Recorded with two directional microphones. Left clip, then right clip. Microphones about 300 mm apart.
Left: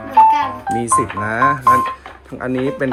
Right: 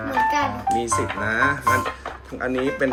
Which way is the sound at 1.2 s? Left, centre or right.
Centre.